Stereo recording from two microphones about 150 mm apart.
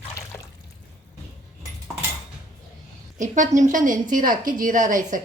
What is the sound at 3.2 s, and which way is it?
A woman's voice, 55° right (ahead or behind).